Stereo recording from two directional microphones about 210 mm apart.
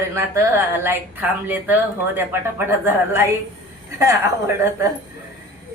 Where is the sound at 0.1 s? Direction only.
15° right (ahead or behind).